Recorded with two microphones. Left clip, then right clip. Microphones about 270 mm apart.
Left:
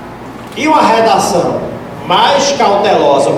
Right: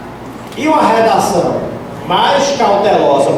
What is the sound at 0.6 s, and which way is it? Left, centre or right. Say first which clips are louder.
Speech: left 2 dB; centre.